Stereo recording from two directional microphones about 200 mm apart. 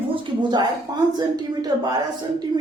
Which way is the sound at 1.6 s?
20° right (ahead or behind).